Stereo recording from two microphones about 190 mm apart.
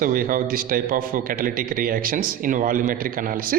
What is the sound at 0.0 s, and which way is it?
A man's voice, 45° right (ahead or behind).